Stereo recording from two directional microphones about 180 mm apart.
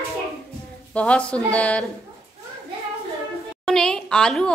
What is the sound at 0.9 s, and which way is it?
Speech, 5° left (ahead or behind).